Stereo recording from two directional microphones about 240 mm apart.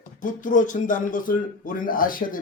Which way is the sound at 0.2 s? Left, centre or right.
Left.